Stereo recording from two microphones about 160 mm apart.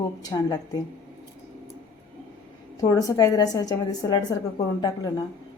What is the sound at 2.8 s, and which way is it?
A woman's voice, 20° left (ahead or behind).